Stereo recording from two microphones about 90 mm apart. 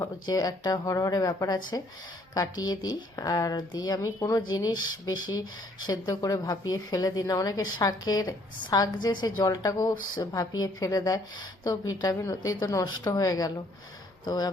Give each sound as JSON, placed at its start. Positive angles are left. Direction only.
{"t": 0.3, "sound": "speech", "side_deg": 45}